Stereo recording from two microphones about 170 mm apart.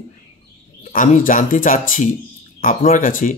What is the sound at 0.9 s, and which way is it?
Speech, 50° left (ahead or behind).